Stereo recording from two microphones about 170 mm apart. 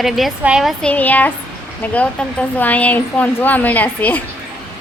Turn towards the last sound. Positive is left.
turn(degrees=10)  # may be behind; listen again after turning